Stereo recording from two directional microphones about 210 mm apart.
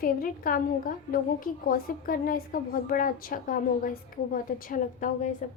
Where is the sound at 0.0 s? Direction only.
40° left (ahead or behind).